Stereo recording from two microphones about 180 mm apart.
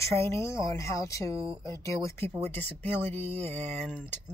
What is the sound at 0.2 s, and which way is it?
Speech, 15° left (ahead or behind).